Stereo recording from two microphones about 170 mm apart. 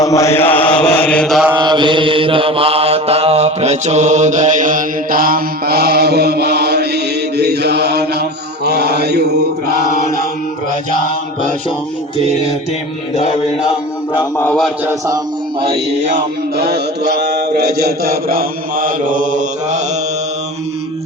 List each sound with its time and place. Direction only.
0.0 s mantra: 20° left (ahead or behind); by 1.5 s 5° left (ahead or behind)
1.5 s mantra: 25° right (ahead or behind); by 9.7 s 70° right (ahead or behind)
13.7 s mantra: 25° left (ahead or behind)
14.4 s a man's voice: 5° left (ahead or behind)
14.8 s chant: 20° right (ahead or behind)
16.6 s mantra: 70° right (ahead or behind); by 19.8 s 50° right (ahead or behind)